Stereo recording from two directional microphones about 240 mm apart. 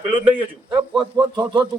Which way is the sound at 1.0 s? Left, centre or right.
Centre.